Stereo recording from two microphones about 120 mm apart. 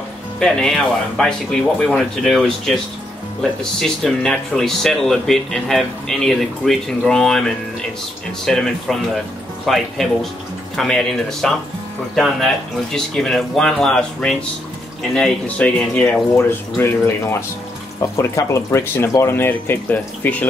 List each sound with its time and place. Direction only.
0.4 s speech: 5° left (ahead or behind)
3.8 s speech: 5° left (ahead or behind)
12.9 s speech: 5° left (ahead or behind)